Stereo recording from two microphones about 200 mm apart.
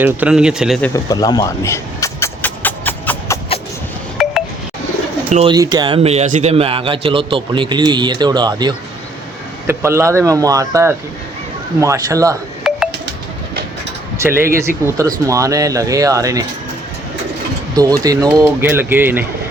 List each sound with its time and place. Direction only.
0.0 s speech: 5° right (ahead or behind)
0.9 s a sound: 20° left (ahead or behind)
5.3 s speech: 30° right (ahead or behind)
5.5 s a man's voice: 20° right (ahead or behind)
12.7 s a sound: centre (ahead or behind)
14.2 s speech: 10° right (ahead or behind)
17.7 s speech: 20° right (ahead or behind)